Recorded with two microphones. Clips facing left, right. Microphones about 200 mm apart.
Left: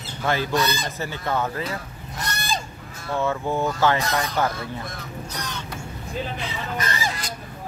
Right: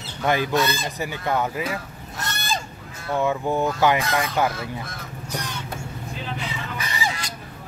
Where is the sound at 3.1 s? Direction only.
15° right (ahead or behind).